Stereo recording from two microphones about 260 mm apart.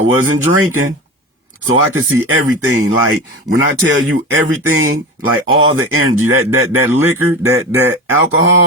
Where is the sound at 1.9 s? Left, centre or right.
Right.